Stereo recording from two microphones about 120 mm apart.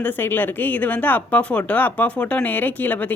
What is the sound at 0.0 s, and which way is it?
Speech, 15° left (ahead or behind).